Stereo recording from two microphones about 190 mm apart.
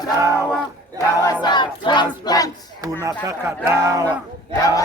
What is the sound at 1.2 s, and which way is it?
Battle cry, 20° left (ahead or behind).